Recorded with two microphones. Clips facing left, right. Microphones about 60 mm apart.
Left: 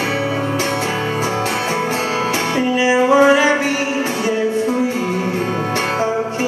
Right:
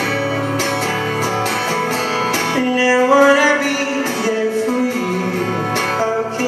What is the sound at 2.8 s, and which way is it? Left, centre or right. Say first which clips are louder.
Music: right 1 dB; right.